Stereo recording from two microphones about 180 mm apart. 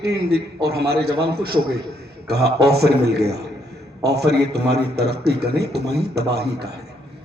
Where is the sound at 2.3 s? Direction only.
65° right (ahead or behind).